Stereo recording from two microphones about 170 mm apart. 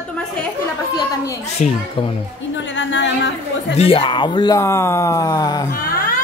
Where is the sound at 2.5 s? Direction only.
90° left.